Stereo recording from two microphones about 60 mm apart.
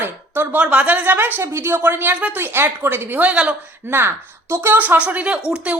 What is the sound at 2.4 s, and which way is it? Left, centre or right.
Speech, right.